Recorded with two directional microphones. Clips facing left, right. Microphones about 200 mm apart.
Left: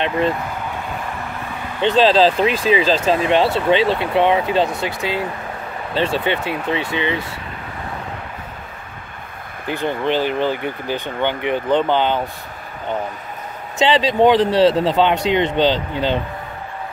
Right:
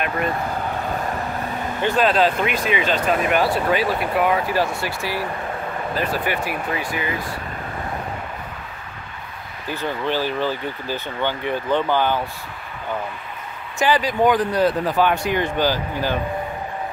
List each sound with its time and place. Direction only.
1.8 s speech: 25° left (ahead or behind)
9.7 s speech: 20° left (ahead or behind)
13.7 s speech: 25° left (ahead or behind)